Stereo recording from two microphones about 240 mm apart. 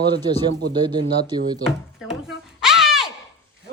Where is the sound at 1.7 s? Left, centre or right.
Centre.